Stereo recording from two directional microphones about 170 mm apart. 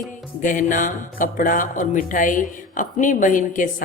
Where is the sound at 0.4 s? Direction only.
50° left (ahead or behind).